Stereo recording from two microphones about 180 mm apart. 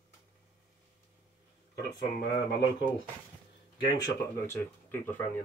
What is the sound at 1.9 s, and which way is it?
Speech, 20° left (ahead or behind).